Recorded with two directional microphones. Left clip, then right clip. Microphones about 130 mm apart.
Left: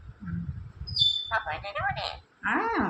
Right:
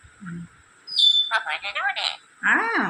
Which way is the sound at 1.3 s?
45° left (ahead or behind).